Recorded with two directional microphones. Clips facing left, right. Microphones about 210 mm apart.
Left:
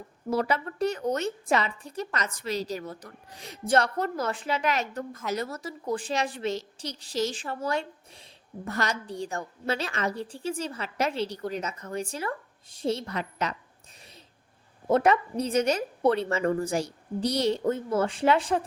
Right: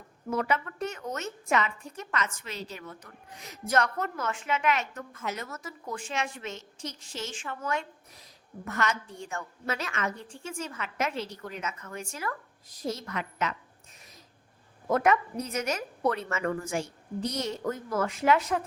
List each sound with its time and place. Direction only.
0.3 s a woman's voice: 35° left (ahead or behind)
14.8 s a woman's voice: 30° left (ahead or behind)